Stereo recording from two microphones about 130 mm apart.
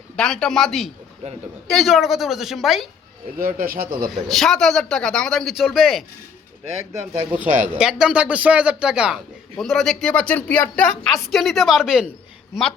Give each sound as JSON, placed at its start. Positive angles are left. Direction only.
{"t": 0.2, "sound": "speech", "side_deg": 5}
{"t": 3.4, "sound": "a man's voice", "side_deg": -90}
{"t": 4.1, "sound": "speech", "side_deg": 0}
{"t": 7.1, "sound": "speech", "side_deg": -15}